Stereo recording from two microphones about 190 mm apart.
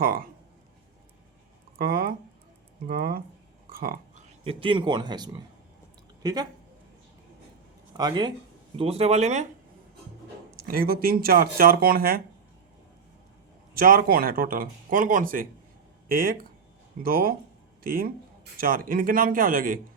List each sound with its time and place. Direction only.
0.0 s speech: 50° right (ahead or behind)
1.8 s speech: 50° right (ahead or behind)
3.7 s a sound: 50° right (ahead or behind)
4.4 s speech: 25° right (ahead or behind)
7.9 s speech: 20° right (ahead or behind); by 9.5 s 35° right (ahead or behind)
10.7 s speech: 55° right (ahead or behind)
13.7 s speech: 50° right (ahead or behind)